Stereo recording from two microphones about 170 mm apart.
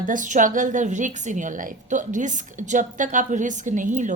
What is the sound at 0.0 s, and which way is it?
A woman's voice, 50° right (ahead or behind).